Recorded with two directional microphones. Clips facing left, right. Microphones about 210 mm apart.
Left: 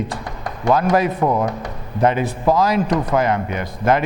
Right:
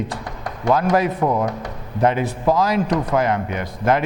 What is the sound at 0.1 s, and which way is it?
A man's voice, 15° left (ahead or behind).